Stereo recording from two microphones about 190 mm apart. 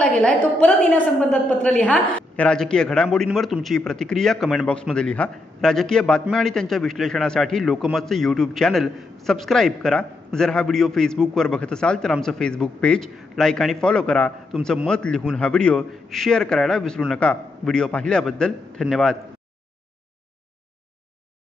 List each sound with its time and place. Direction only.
0.0 s a man's voice: 5° left (ahead or behind)